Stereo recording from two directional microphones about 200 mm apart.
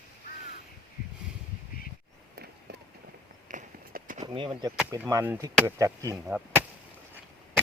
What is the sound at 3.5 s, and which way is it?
Run, 40° right (ahead or behind).